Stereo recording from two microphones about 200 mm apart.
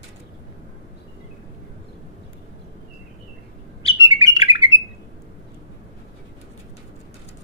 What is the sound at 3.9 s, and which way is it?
Bird, 15° right (ahead or behind).